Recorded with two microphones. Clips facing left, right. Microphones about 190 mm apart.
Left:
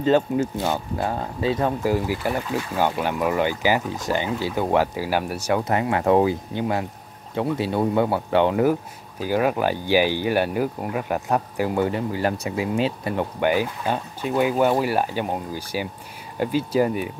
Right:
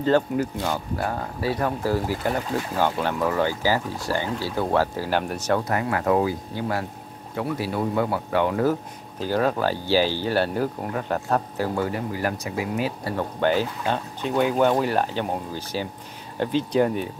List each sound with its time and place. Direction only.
0.0 s speech: 20° left (ahead or behind)
5.7 s speech: 25° left (ahead or behind)
9.2 s speech: 10° left (ahead or behind)